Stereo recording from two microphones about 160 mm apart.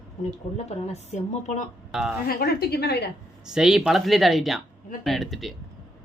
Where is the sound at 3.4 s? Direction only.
5° right (ahead or behind).